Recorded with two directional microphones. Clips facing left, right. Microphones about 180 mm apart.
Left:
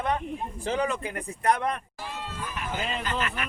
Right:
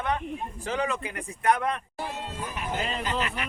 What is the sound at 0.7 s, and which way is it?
Speech, 30° left (ahead or behind).